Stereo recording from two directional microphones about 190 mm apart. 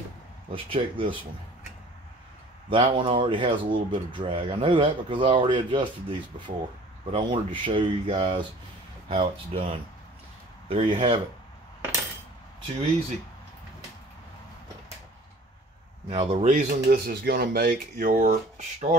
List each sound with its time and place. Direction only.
0.5 s speech: 25° right (ahead or behind)
2.7 s speech: 25° right (ahead or behind)
16.1 s speech: 30° right (ahead or behind)